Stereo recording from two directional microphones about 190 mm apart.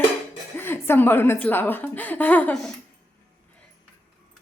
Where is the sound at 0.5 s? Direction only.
10° left (ahead or behind).